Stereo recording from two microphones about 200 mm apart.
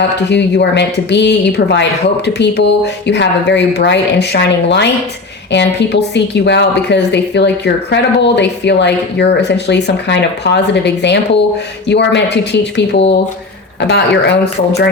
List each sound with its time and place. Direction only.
0.3 s speech: 60° left (ahead or behind)